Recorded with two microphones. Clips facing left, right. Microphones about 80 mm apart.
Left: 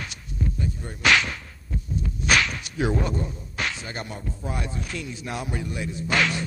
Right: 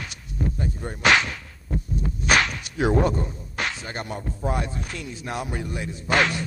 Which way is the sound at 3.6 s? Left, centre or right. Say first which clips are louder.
Right 1 dB; right.